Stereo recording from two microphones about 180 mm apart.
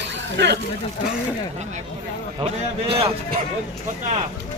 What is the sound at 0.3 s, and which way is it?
Speech, 65° right (ahead or behind).